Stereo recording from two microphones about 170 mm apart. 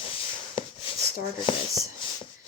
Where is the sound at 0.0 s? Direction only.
30° left (ahead or behind).